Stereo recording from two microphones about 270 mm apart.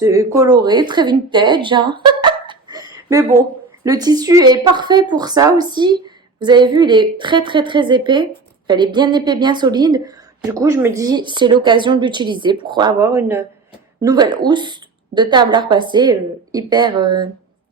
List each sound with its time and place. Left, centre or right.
0.0 s a woman's voice: centre